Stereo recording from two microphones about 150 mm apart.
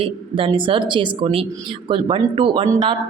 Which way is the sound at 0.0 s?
35° right (ahead or behind).